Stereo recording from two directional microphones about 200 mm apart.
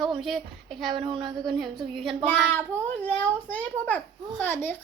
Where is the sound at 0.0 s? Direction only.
Centre (ahead or behind).